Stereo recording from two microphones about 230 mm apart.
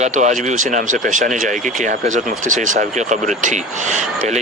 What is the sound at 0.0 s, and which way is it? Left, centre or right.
Speech, right.